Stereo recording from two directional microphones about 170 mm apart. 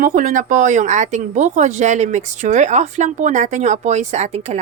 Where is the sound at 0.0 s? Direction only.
50° right (ahead or behind).